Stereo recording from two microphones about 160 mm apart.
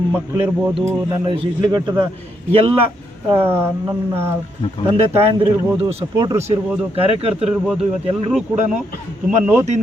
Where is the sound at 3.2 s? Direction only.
15° right (ahead or behind).